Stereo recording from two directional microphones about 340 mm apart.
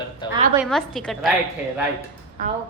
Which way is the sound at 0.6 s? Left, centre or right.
Centre.